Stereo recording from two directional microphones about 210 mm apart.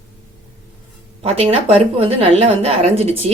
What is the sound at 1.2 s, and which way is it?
A woman's voice, 25° right (ahead or behind).